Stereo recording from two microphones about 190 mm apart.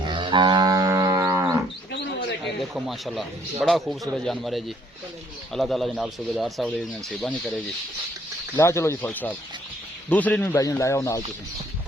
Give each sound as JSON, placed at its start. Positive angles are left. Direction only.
{"t": 0.1, "sound": "livestock", "side_deg": -25}
{"t": 2.4, "sound": "a man's voice", "side_deg": 0}
{"t": 8.5, "sound": "speech", "side_deg": 15}